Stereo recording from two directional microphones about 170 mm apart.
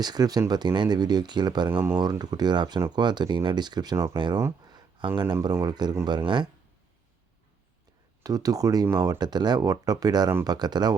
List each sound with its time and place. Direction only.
0.0 s speech: 25° right (ahead or behind)
1.7 s speech: 10° right (ahead or behind)
2.0 s speech: 25° right (ahead or behind)
4.4 s a sound: 25° right (ahead or behind)
5.2 s speech: 20° right (ahead or behind)
8.2 s speech: 20° right (ahead or behind)